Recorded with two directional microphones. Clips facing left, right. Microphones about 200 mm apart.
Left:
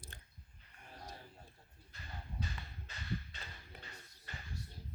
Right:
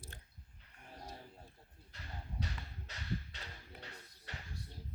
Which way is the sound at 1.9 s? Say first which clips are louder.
Right 1 dB; 75° right (ahead or behind).